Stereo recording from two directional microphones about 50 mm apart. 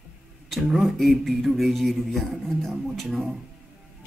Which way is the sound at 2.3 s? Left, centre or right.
Centre.